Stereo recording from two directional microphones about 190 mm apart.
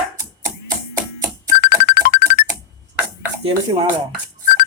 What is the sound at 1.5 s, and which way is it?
Music, 45° left (ahead or behind).